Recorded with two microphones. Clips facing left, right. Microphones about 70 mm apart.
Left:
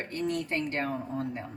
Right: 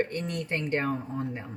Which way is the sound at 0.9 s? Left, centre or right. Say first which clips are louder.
Even; centre.